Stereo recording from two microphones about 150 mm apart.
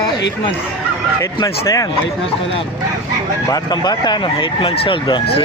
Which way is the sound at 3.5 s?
30° left (ahead or behind).